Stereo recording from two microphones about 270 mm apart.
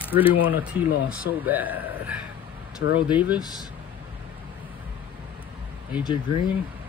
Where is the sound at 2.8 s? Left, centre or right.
Left.